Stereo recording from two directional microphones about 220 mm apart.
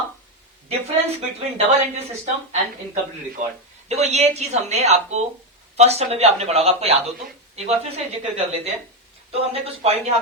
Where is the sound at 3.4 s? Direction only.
35° right (ahead or behind).